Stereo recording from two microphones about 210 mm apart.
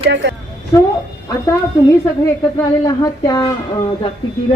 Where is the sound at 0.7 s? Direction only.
15° left (ahead or behind).